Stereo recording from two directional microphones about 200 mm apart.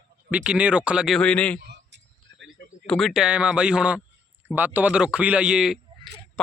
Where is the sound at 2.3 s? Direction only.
60° right (ahead or behind).